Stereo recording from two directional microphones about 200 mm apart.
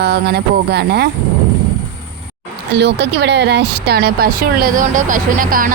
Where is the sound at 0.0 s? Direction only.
55° right (ahead or behind).